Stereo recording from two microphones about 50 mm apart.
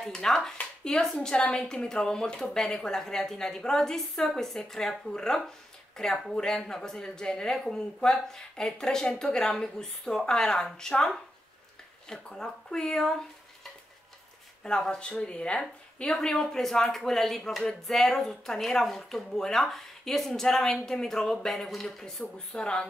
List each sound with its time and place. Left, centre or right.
0.0 s speech: centre
1.1 s speech: left
14.6 s speech: centre
16.1 s speech: centre